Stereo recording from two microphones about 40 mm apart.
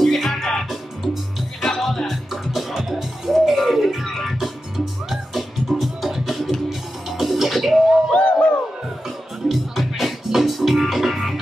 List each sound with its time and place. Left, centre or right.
0.0 s music: centre
1.6 s music: centre
8.1 s music: left
9.5 s music: centre